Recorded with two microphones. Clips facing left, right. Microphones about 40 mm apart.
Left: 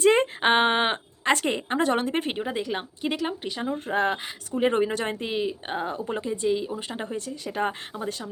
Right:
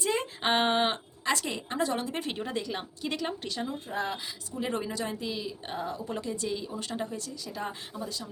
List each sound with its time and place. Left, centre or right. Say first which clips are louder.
0.0 s a sound: left 10 dB; left
0.4 s speech: left 3 dB; left
2.4 s a woman's voice: left 5 dB; centre
3.8 s speech: left 8 dB; left